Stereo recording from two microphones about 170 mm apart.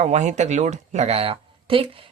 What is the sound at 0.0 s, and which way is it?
Speech, 45° right (ahead or behind).